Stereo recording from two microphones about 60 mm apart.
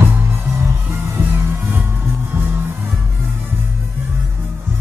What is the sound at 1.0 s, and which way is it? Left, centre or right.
Music, right.